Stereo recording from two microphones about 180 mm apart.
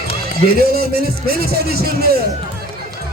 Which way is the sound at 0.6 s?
60° right (ahead or behind).